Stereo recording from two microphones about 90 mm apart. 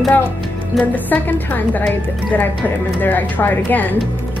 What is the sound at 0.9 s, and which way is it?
Speech, 20° left (ahead or behind).